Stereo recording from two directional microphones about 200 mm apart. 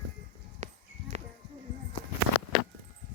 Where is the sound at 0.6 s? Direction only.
35° right (ahead or behind).